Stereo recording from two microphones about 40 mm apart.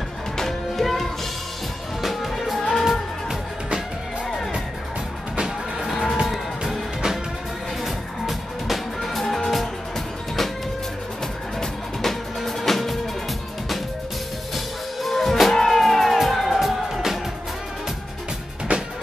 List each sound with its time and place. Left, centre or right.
0.4 s music: centre
5.4 s music: centre
7.8 s music: centre
11.6 s music: centre
14.5 s music: centre
18.7 s music: right